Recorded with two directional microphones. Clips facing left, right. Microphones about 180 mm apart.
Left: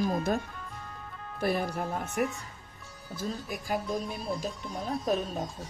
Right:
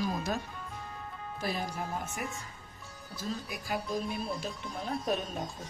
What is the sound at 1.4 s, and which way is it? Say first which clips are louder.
Speech: left 6 dB; 60° left (ahead or behind).